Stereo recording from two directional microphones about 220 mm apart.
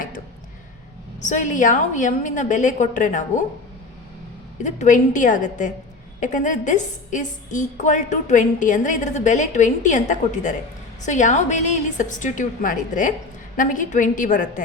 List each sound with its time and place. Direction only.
1.2 s a woman's voice: 35° left (ahead or behind)
4.6 s a woman's voice: 35° left (ahead or behind)